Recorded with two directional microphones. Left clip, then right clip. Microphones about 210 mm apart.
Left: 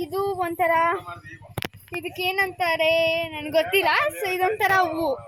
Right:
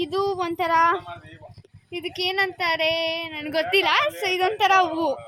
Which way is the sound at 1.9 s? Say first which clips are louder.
Right 1 dB; 50° right (ahead or behind).